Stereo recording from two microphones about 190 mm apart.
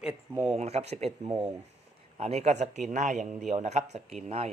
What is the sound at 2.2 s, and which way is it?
Speech, 35° right (ahead or behind).